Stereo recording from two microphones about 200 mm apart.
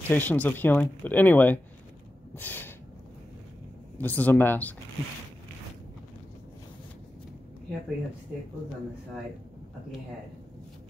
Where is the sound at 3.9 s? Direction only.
10° left (ahead or behind).